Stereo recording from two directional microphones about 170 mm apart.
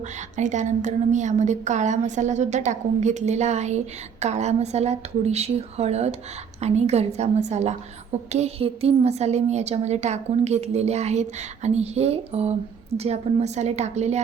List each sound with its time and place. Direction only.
0.3 s a woman's voice: 45° right (ahead or behind)